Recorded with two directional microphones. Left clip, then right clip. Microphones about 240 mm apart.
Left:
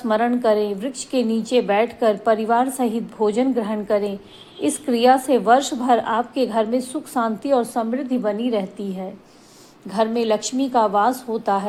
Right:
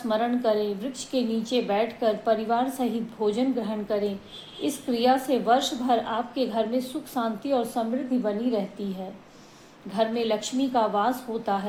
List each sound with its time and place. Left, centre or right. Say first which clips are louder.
0.1 s a woman's voice: left 6 dB; left
9.9 s a woman's voice: left 6 dB; left